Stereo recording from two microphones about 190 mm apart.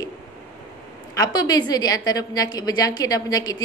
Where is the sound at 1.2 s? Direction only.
20° left (ahead or behind).